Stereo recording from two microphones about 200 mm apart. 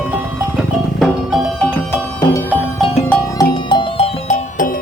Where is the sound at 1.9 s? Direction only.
10° left (ahead or behind).